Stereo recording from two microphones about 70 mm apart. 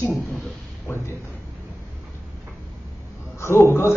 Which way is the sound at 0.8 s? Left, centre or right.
Left.